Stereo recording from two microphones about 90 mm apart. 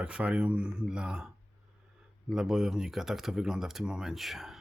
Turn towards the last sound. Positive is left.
turn(degrees=0)  # may be behind; listen again after turning